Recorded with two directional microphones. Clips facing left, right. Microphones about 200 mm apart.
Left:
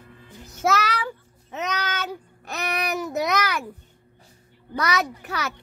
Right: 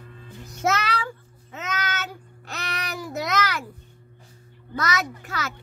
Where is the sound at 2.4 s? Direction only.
15° left (ahead or behind).